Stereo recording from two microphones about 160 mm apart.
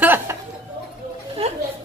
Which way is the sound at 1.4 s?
40° right (ahead or behind).